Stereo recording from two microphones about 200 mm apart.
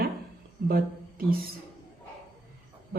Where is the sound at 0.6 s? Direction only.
50° right (ahead or behind).